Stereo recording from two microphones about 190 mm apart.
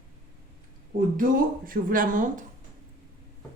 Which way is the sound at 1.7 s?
45° right (ahead or behind).